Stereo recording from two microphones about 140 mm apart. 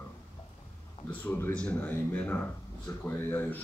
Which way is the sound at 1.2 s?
15° left (ahead or behind).